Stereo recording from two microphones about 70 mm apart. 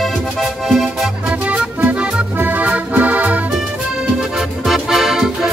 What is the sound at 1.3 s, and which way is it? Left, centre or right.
Music, right.